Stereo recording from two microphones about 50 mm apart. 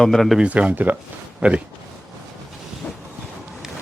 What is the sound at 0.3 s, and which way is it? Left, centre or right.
Speech, right.